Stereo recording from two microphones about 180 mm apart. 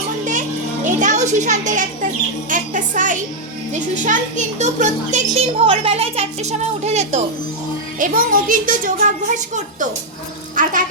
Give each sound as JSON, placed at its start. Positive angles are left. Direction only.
{"t": 0.9, "sound": "a woman's voice", "side_deg": -45}
{"t": 7.9, "sound": "speech", "side_deg": -50}
{"t": 10.5, "sound": "speech", "side_deg": -45}